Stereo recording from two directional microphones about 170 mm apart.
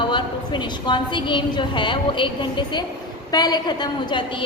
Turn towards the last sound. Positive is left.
turn(degrees=25)  # may be behind; listen again after turning